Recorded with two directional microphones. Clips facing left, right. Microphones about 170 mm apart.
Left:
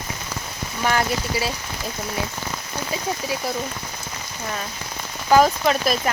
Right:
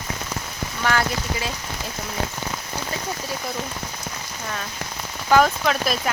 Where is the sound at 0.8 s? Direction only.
15° left (ahead or behind).